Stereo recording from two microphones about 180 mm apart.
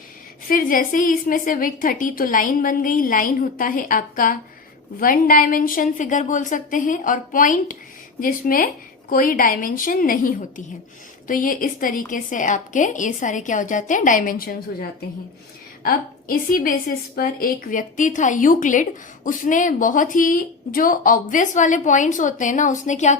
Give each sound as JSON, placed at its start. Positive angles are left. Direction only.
{"t": 0.4, "sound": "a woman's voice", "side_deg": 50}